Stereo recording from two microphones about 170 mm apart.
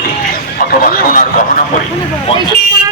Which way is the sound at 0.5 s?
55° left (ahead or behind).